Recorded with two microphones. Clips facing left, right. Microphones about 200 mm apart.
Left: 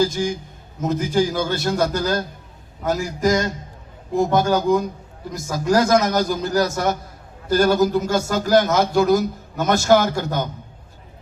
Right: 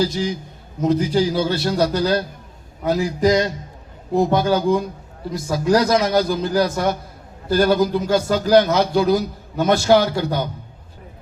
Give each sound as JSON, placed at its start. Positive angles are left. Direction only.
{"t": 0.0, "sound": "a man's voice", "side_deg": 50}